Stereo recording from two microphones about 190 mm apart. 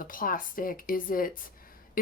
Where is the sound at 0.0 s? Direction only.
50° left (ahead or behind).